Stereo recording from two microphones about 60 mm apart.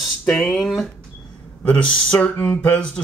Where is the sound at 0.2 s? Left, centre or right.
Centre.